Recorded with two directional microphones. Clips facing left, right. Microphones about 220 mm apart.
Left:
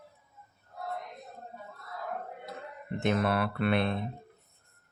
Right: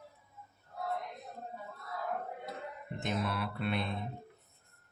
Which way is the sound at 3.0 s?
70° left (ahead or behind).